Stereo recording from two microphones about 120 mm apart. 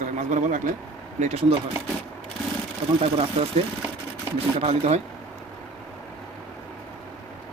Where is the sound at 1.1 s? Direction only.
65° right (ahead or behind).